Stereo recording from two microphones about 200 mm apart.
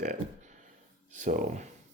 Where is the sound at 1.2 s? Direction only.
40° right (ahead or behind).